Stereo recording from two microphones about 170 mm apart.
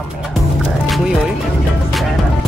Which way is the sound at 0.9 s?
5° right (ahead or behind).